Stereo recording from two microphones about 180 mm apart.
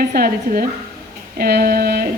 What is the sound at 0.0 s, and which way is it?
Speech, 55° right (ahead or behind).